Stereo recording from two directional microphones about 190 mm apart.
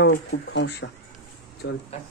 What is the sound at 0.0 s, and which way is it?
Speech, 65° left (ahead or behind).